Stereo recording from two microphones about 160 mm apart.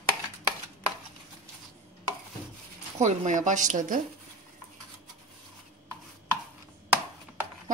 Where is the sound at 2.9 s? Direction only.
50° right (ahead or behind).